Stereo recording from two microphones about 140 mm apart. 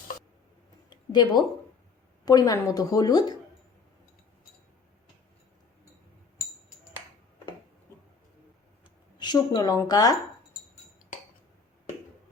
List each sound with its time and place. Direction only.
0.9 s a sound: 30° left (ahead or behind)
2.2 s a woman's voice: 25° left (ahead or behind)
9.1 s a woman's voice: 30° left (ahead or behind)